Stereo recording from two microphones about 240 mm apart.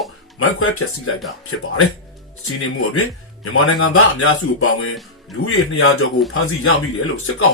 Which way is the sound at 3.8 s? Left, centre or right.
Left.